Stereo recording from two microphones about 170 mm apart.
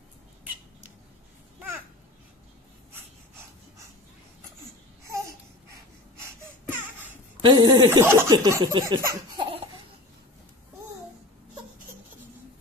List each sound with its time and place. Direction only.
3.0 s breathing: 15° right (ahead or behind)
5.0 s babbling: 15° right (ahead or behind)
7.4 s laughter: 25° right (ahead or behind)
8.0 s laughter: 15° right (ahead or behind)